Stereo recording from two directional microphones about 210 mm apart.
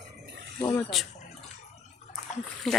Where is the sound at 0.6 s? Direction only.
15° left (ahead or behind).